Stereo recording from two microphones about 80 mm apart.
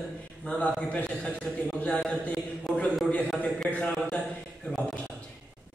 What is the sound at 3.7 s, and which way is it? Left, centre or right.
Speech, centre.